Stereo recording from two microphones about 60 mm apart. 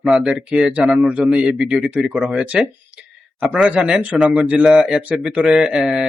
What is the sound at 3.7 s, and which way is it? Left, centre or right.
Speech, centre.